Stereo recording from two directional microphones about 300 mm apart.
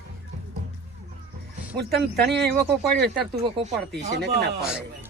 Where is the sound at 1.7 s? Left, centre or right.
Right.